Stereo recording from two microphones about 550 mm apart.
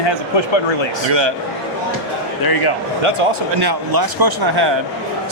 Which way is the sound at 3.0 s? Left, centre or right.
Right.